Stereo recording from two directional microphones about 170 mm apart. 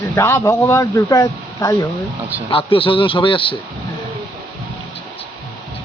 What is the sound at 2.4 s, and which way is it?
A man's voice, 30° left (ahead or behind).